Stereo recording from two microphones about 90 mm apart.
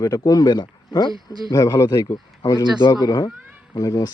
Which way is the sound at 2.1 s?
45° left (ahead or behind).